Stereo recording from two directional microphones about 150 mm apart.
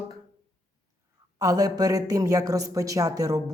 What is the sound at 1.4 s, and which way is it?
Speech, 25° right (ahead or behind).